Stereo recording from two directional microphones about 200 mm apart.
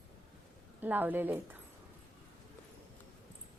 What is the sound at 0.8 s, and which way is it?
Speech, 10° right (ahead or behind).